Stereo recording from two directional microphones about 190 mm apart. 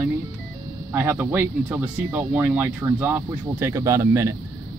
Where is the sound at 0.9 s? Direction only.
10° right (ahead or behind).